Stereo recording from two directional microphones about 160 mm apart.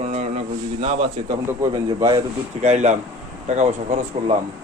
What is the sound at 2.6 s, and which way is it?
Speech, 45° right (ahead or behind).